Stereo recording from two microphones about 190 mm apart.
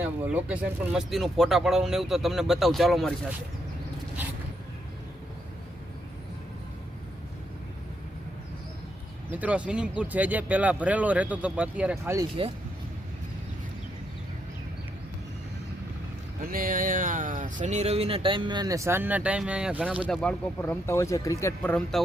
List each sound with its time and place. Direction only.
0.0 s speech: 5° right (ahead or behind)
9.3 s speech: 5° right (ahead or behind)
16.4 s speech: 50° right (ahead or behind); by 20.2 s 5° right (ahead or behind)
20.2 s speech: 10° left (ahead or behind)